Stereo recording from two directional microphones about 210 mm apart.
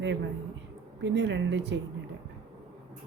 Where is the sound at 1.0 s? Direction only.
55° right (ahead or behind).